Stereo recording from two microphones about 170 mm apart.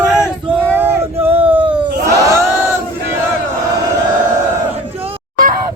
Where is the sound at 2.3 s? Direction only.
15° right (ahead or behind).